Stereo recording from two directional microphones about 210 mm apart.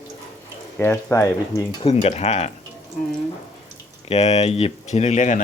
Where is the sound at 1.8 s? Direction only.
30° left (ahead or behind).